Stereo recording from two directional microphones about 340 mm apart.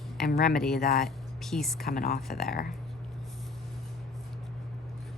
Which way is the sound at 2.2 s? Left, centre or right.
Centre.